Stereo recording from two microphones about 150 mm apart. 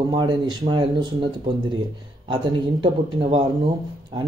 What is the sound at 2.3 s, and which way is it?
Speech, 35° right (ahead or behind).